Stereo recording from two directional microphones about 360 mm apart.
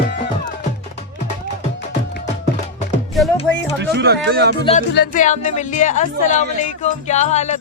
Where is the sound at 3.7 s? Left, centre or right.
Right.